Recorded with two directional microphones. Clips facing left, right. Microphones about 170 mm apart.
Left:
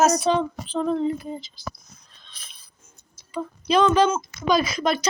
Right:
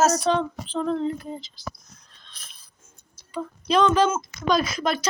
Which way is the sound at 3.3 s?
Centre (ahead or behind).